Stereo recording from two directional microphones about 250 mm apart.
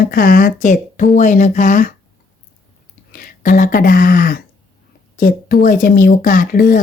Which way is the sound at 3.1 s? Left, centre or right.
Left.